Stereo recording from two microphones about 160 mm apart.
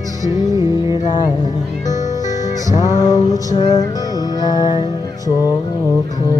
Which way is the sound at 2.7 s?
25° left (ahead or behind).